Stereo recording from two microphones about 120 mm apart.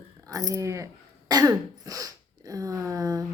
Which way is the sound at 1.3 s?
30° right (ahead or behind).